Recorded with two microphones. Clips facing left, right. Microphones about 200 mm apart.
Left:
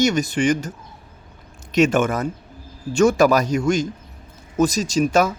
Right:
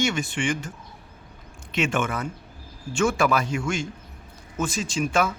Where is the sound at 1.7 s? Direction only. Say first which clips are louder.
Left 8 dB; 40° left (ahead or behind).